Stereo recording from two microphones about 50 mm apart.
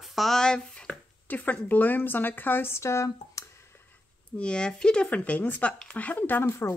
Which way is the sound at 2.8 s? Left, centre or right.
Left.